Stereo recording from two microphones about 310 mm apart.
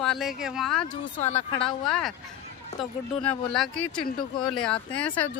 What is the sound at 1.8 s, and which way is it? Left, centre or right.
A man's voice, centre.